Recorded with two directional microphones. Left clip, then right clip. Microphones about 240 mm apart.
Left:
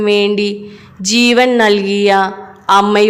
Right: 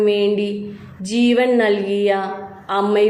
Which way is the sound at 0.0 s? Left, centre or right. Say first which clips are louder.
Left 4 dB; left.